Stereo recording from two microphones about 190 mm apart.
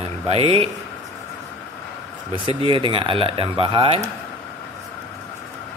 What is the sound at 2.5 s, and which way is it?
Speech, 25° right (ahead or behind).